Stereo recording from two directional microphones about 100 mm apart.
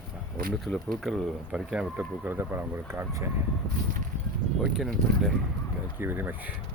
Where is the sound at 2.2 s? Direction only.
20° right (ahead or behind).